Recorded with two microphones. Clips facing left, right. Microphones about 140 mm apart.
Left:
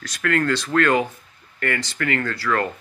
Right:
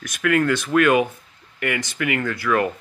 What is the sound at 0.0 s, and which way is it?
Speech, 15° right (ahead or behind).